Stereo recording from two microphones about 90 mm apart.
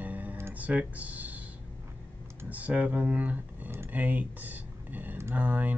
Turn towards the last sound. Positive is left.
turn(degrees=-20)  # may be behind; listen again after turning